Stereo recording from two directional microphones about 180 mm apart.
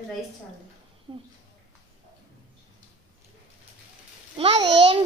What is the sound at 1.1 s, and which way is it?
Speech, 25° right (ahead or behind).